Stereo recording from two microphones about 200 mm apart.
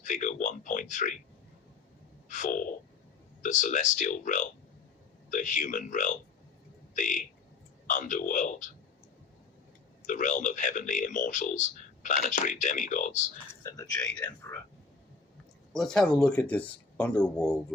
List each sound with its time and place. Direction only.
0.0 s speech: 40° left (ahead or behind)
2.3 s speech: 40° left (ahead or behind)
10.1 s speech: 40° left (ahead or behind)
14.2 s speech: 20° left (ahead or behind)
15.7 s speech: centre (ahead or behind)